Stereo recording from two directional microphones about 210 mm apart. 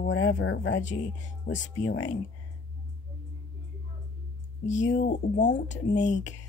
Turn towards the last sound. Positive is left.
turn(degrees=35)  # may be behind; listen again after turning